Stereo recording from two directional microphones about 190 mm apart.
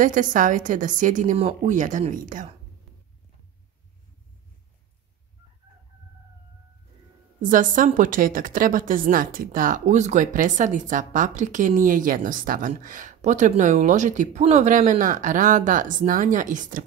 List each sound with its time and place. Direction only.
0.0 s a woman's voice: 45° right (ahead or behind)
7.4 s a woman's voice: 45° right (ahead or behind)